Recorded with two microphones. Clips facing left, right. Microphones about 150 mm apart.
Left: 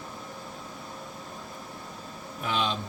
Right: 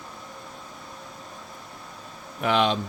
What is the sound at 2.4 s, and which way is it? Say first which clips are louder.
Speech: right 7 dB; 70° right (ahead or behind).